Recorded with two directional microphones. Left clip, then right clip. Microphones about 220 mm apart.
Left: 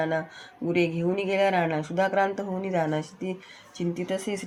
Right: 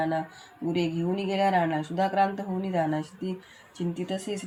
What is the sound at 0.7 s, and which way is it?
Speech, 30° left (ahead or behind).